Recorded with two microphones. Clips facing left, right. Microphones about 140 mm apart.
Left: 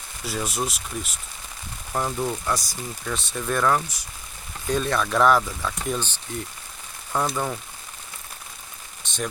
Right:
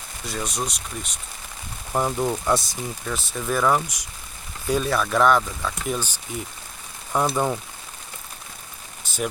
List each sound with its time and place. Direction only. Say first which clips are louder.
0.3 s speech: left 1 dB; 5° left (ahead or behind)
1.9 s rain on surface: right 3 dB; 15° right (ahead or behind)
3.1 s speech: even; 5° right (ahead or behind)
7.1 s rain on surface: right 3 dB; 15° right (ahead or behind)
9.0 s rain on surface: right 1 dB; 5° right (ahead or behind)